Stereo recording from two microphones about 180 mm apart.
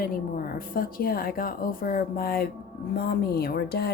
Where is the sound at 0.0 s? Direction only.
50° left (ahead or behind).